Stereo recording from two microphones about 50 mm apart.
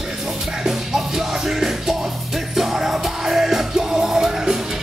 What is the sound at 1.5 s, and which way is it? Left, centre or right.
Music, centre.